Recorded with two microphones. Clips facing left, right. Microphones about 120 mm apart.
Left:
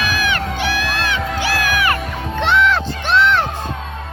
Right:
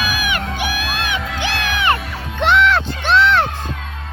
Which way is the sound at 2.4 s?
60° right (ahead or behind).